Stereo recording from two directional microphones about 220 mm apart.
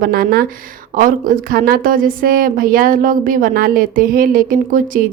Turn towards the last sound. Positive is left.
turn(degrees=-40)  # may be behind; listen again after turning